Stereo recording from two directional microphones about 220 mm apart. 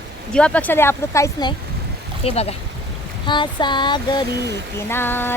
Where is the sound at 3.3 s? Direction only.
20° left (ahead or behind).